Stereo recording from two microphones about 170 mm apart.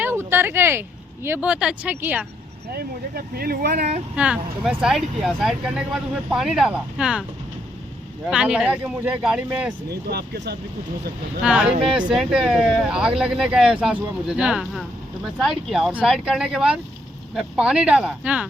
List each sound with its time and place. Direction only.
0.0 s speech: 15° right (ahead or behind)
2.7 s speech: 60° right (ahead or behind); by 4.0 s 45° right (ahead or behind)
4.1 s speech: 5° right (ahead or behind)
8.3 s speech: 5° right (ahead or behind)
9.9 s speech: 70° right (ahead or behind)
11.9 s speech: 5° right (ahead or behind)